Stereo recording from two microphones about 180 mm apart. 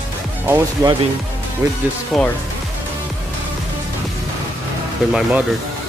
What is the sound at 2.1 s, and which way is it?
Speech, centre (ahead or behind).